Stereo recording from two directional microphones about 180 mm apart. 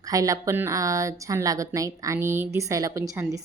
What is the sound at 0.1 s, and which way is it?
A woman's voice, 20° right (ahead or behind).